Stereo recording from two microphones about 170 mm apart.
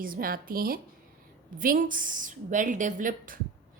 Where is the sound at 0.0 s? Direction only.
55° right (ahead or behind).